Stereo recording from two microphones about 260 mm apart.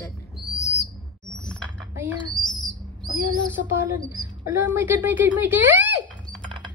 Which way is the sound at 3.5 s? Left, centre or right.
Centre.